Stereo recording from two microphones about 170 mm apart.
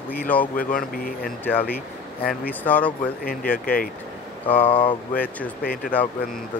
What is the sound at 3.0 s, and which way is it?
Speech, 60° left (ahead or behind).